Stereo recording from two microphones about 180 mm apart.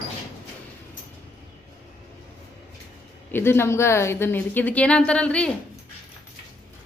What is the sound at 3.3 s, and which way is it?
A woman's voice, 15° left (ahead or behind).